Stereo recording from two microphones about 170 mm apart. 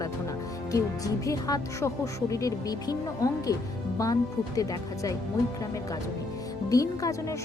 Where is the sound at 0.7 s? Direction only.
20° left (ahead or behind).